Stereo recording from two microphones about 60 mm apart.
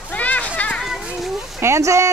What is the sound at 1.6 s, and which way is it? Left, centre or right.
Speech, right.